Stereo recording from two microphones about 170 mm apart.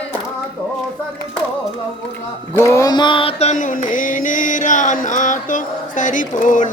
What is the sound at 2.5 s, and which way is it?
Mantra, 15° left (ahead or behind).